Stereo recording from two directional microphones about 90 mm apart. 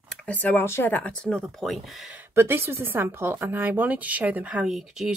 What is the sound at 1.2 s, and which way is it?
Speech, 5° left (ahead or behind).